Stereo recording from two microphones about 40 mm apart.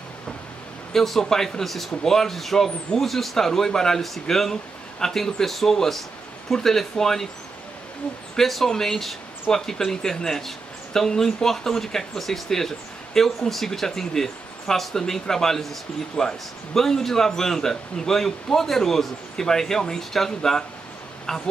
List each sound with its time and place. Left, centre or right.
0.9 s a man's voice: centre
8.4 s a man's voice: centre